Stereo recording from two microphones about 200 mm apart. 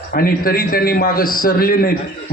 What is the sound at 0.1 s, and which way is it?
A man's voice, 50° left (ahead or behind).